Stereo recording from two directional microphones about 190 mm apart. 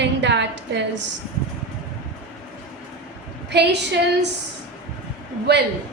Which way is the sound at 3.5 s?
65° right (ahead or behind).